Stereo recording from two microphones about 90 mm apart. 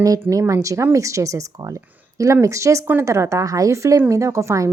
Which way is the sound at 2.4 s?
35° right (ahead or behind).